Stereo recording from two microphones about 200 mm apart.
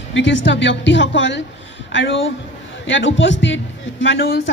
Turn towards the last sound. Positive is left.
turn(degrees=55)  # may be behind; listen again after turning